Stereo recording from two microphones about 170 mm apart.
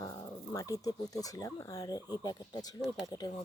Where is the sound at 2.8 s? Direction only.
Centre (ahead or behind).